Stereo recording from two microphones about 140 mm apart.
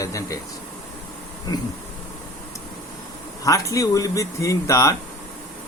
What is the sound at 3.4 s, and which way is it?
Speech, 25° left (ahead or behind).